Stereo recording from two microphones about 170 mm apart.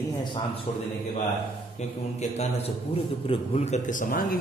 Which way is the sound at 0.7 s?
35° left (ahead or behind).